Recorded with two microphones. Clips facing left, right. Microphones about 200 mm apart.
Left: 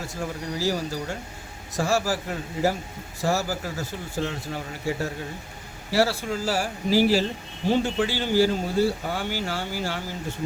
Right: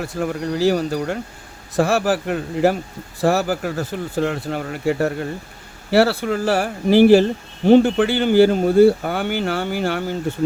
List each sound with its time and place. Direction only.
0.0 s speech: 60° right (ahead or behind)